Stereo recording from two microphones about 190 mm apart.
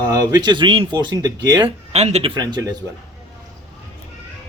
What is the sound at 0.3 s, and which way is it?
Speech, 20° right (ahead or behind).